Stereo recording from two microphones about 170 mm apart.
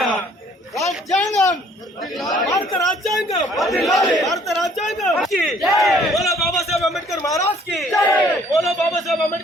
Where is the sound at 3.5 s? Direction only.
Centre (ahead or behind).